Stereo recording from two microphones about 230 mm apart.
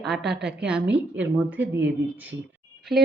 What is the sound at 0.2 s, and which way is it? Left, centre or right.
Speech, right.